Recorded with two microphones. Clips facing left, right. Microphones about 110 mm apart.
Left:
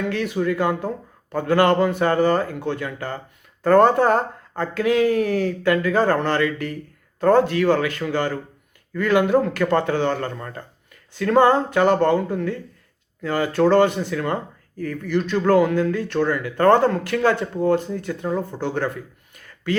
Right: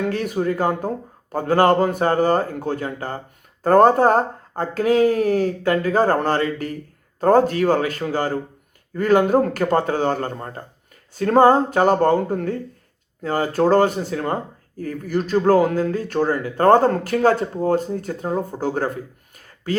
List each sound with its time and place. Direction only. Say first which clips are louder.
0.0 s speech: right 1 dB; 45° right (ahead or behind)